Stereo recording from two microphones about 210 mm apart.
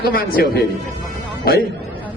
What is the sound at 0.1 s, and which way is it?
A man's voice, 45° left (ahead or behind).